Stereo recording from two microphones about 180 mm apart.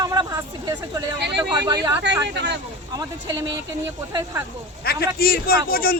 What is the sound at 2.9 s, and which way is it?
A woman's voice, 20° right (ahead or behind).